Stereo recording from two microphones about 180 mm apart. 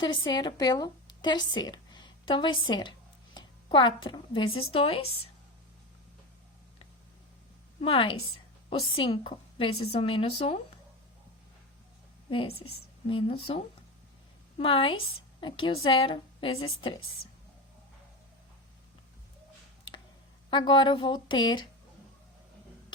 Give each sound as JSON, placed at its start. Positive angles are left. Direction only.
{"t": 0.0, "sound": "a woman's voice", "side_deg": 25}
{"t": 7.8, "sound": "a woman's voice", "side_deg": 30}
{"t": 13.1, "sound": "a woman's voice", "side_deg": 30}
{"t": 14.6, "sound": "a woman's voice", "side_deg": 30}
{"t": 20.5, "sound": "a woman's voice", "side_deg": 25}